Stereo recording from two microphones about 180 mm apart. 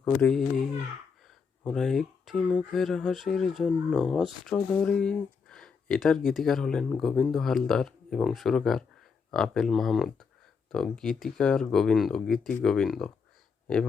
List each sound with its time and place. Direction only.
0.0 s speech: 5° left (ahead or behind)